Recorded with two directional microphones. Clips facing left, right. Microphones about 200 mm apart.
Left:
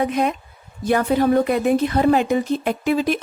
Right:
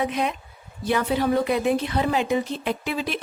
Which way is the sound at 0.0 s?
45° left (ahead or behind).